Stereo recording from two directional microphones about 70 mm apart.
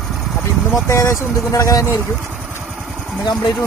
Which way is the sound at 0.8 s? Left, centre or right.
Left.